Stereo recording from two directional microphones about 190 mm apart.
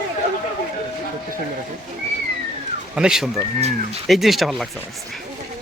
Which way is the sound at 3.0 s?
5° right (ahead or behind).